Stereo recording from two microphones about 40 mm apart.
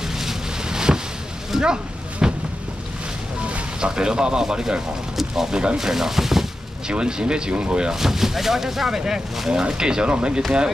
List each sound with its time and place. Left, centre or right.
0.2 s boat: centre
1.5 s a sound: centre
3.4 s speech: right; by 6.4 s centre
6.9 s speech: right
7.9 s speech: centre; by 10.4 s right